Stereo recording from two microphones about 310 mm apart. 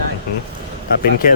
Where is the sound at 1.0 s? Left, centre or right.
Left.